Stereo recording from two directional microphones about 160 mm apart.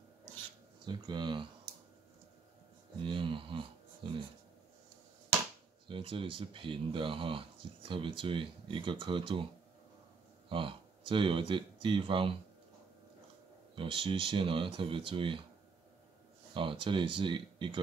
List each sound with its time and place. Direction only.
0.8 s speech: 30° right (ahead or behind)
3.0 s a sound: 30° right (ahead or behind)
5.9 s speech: 30° right (ahead or behind)
10.5 s speech: 30° right (ahead or behind)
13.7 s speech: 30° right (ahead or behind)
16.5 s speech: 30° right (ahead or behind)